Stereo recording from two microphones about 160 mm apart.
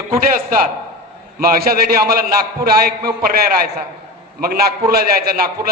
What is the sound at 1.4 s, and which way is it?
Speech, 70° right (ahead or behind).